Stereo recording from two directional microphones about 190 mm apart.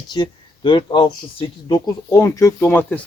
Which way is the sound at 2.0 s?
15° left (ahead or behind).